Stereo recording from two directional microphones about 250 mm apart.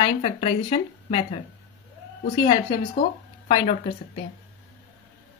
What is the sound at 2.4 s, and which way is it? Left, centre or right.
A woman's voice, centre.